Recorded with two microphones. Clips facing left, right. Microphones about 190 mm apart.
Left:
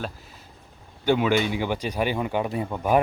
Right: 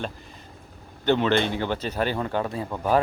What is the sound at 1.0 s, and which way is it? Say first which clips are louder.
Speech: even; 10° left (ahead or behind).